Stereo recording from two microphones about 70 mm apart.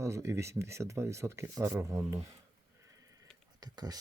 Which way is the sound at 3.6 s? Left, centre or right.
Right.